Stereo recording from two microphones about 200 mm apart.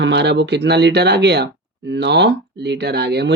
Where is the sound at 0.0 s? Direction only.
60° right (ahead or behind).